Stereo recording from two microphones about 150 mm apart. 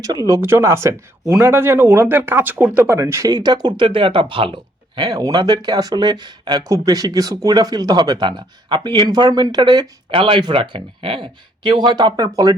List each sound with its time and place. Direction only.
0.0 s speech: 25° right (ahead or behind)
4.9 s speech: 25° right (ahead or behind)